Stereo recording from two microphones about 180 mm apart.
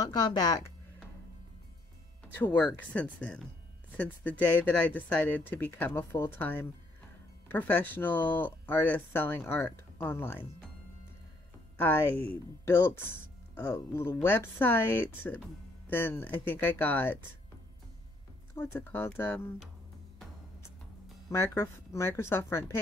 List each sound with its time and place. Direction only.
0.0 s speech: 25° left (ahead or behind)
2.4 s speech: 10° left (ahead or behind)
11.7 s speech: 10° left (ahead or behind)
18.5 s speech: 10° left (ahead or behind)
21.3 s speech: 15° left (ahead or behind)